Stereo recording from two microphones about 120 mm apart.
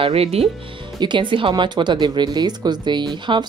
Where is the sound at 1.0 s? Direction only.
40° right (ahead or behind).